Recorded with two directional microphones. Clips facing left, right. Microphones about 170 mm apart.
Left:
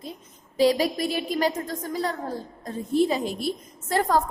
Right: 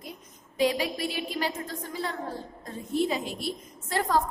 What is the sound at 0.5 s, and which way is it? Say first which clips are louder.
A woman's voice: left 5 dB; 35° left (ahead or behind).